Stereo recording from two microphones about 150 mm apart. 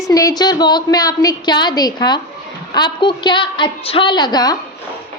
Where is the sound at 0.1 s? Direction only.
25° left (ahead or behind).